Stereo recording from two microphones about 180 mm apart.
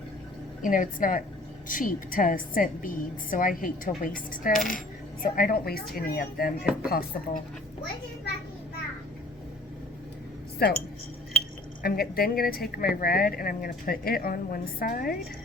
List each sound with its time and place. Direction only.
0.6 s a woman's voice: 50° left (ahead or behind)
10.6 s speech: 60° left (ahead or behind)
11.8 s speech: 55° left (ahead or behind)